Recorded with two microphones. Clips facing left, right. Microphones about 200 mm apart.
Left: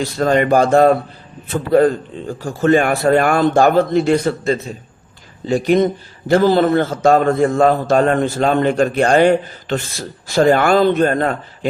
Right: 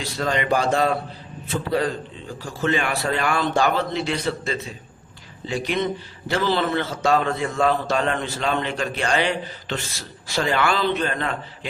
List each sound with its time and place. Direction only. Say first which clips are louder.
0.0 s a man's voice: left 9 dB; 50° left (ahead or behind)